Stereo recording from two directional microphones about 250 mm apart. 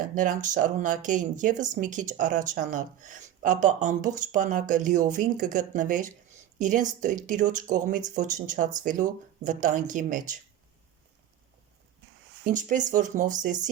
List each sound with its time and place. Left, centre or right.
0.0 s speech: right
12.5 s speech: right